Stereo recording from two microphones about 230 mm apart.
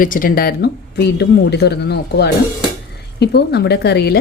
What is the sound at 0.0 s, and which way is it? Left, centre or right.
Speech, left.